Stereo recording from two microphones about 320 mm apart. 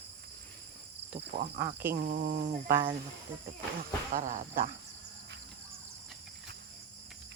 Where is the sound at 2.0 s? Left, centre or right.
Right.